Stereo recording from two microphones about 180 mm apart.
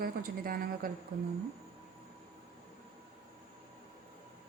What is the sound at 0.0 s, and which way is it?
Speech, 55° right (ahead or behind).